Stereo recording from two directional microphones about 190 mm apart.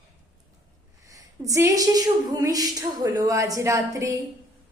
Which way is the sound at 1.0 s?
15° right (ahead or behind).